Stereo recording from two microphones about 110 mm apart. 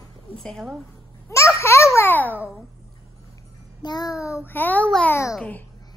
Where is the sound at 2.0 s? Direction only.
15° left (ahead or behind).